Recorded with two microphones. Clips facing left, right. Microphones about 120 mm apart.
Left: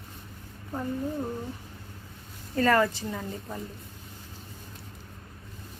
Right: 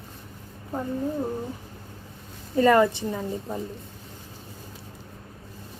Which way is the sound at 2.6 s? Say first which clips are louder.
Right 5 dB; 15° right (ahead or behind).